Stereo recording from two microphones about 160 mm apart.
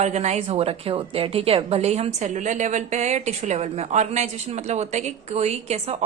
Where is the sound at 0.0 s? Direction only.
45° right (ahead or behind).